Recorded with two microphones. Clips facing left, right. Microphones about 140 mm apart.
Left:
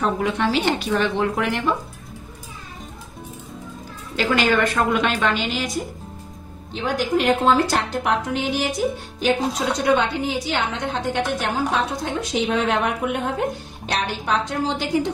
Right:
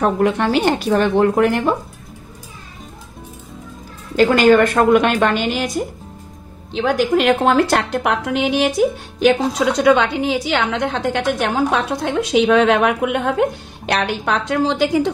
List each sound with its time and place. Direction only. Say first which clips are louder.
0.0 s speech: right 5 dB; 55° right (ahead or behind)
4.2 s speech: right 8 dB; 45° right (ahead or behind)
6.7 s a woman's voice: right 5 dB; 80° right
9.8 s a woman's voice: right 4 dB; 90° right